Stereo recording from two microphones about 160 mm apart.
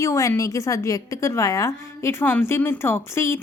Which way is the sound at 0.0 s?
20° left (ahead or behind).